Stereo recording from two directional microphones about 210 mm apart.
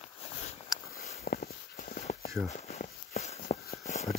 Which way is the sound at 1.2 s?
45° left (ahead or behind).